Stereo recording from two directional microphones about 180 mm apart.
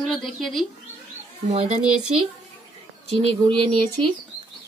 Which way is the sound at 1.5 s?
35° right (ahead or behind).